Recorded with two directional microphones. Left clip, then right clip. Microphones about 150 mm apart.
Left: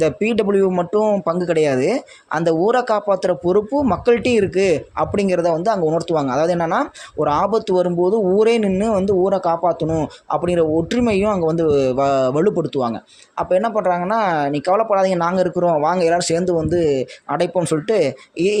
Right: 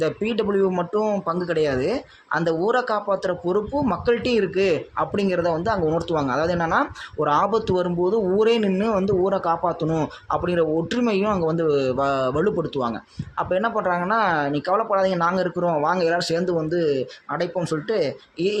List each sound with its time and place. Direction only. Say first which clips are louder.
0.0 s speech: left 5 dB; 40° left (ahead or behind)
17.3 s speech: left 6 dB; 55° left (ahead or behind)